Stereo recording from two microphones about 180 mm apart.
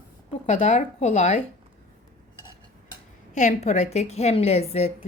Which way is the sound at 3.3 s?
40° left (ahead or behind).